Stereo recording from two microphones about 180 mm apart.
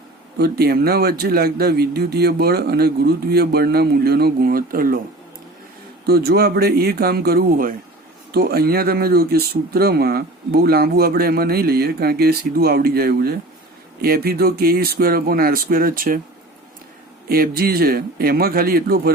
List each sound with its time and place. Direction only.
0.3 s speech: 60° right (ahead or behind)
6.1 s speech: 60° right (ahead or behind)
17.2 s speech: 55° right (ahead or behind)